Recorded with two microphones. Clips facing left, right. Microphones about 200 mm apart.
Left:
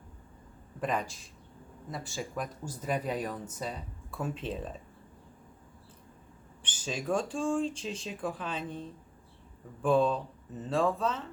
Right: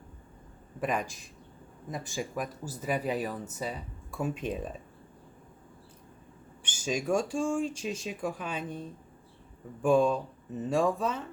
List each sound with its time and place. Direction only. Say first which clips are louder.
0.8 s speech: right 1 dB; 10° right (ahead or behind)
6.6 s speech: right 5 dB; 10° right (ahead or behind)
9.8 s speech: right 2 dB; 10° right (ahead or behind)